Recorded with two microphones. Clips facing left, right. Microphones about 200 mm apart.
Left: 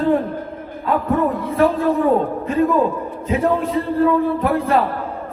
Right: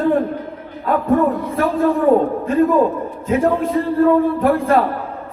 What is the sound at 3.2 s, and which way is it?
A man's voice, 50° right (ahead or behind).